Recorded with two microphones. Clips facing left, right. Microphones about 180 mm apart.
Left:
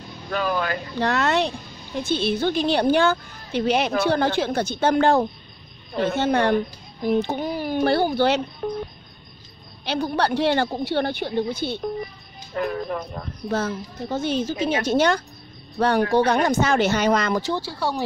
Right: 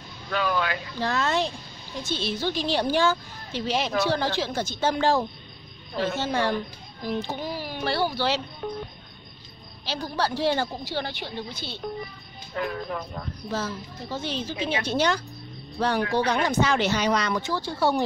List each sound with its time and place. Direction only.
0.3 s a woman's voice: 45° left (ahead or behind)
0.9 s a woman's voice: 65° left (ahead or behind)
8.6 s cricket: 45° left (ahead or behind)
9.8 s a woman's voice: 60° left (ahead or behind); by 13.0 s 45° left (ahead or behind)
13.5 s a woman's voice: 55° left (ahead or behind)
17.6 s speech: 5° left (ahead or behind)